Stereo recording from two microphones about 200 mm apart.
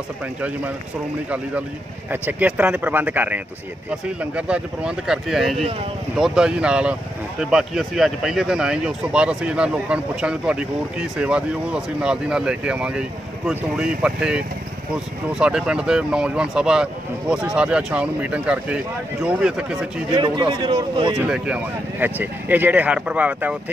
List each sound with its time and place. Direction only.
2.0 s speech: 10° right (ahead or behind)
20.2 s speech: 25° right (ahead or behind)
22.0 s speech: 10° right (ahead or behind)